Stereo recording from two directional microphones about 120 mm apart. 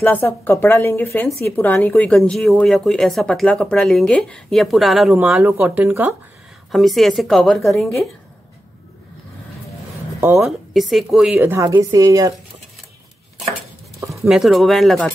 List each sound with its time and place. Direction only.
0.0 s a woman's voice: 20° left (ahead or behind); by 5.2 s centre (ahead or behind)
5.6 s speech: 15° right (ahead or behind)
6.7 s a woman's voice: centre (ahead or behind)
10.4 s a woman's voice: centre (ahead or behind)
11.3 s speech: 15° right (ahead or behind)
11.6 s a woman's voice: 30° right (ahead or behind)
14.1 s a woman's voice: 5° right (ahead or behind)